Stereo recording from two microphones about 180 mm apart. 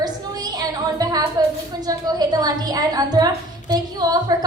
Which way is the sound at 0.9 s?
20° right (ahead or behind).